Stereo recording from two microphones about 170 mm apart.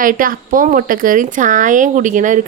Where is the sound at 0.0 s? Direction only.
55° right (ahead or behind).